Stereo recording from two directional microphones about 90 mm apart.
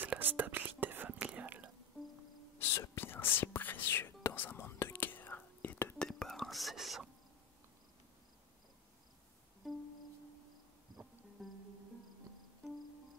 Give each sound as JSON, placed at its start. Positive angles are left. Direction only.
{"t": 0.0, "sound": "whispering", "side_deg": -20}
{"t": 2.6, "sound": "whispering", "side_deg": 35}
{"t": 5.9, "sound": "whispering", "side_deg": 5}
{"t": 9.6, "sound": "music", "side_deg": 0}
{"t": 11.4, "sound": "music", "side_deg": 0}